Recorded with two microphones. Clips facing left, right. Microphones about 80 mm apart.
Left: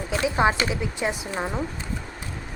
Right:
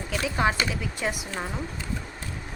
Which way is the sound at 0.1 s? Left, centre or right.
Left.